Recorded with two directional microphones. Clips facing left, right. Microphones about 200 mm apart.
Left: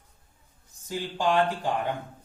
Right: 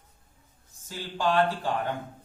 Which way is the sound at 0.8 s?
15° left (ahead or behind).